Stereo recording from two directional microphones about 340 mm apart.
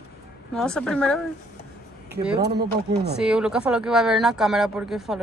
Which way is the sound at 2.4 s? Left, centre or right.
Right.